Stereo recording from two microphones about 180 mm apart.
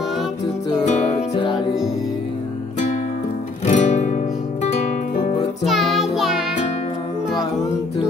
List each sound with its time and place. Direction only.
0.8 s music: 40° left (ahead or behind)
3.6 s guitar: 45° left (ahead or behind)
5.6 s music: centre (ahead or behind)